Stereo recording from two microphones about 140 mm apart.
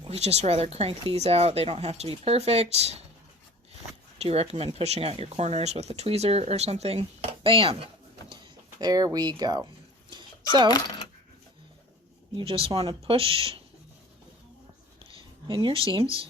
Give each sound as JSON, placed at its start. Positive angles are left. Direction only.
{"t": 0.1, "sound": "speech", "side_deg": -50}
{"t": 4.2, "sound": "speech", "side_deg": -45}
{"t": 8.3, "sound": "speech", "side_deg": -30}
{"t": 10.1, "sound": "a sound", "side_deg": -30}
{"t": 12.4, "sound": "speech", "side_deg": -40}
{"t": 15.4, "sound": "speech", "side_deg": -35}